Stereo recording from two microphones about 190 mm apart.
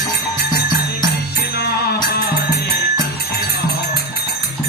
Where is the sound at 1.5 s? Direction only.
55° left (ahead or behind).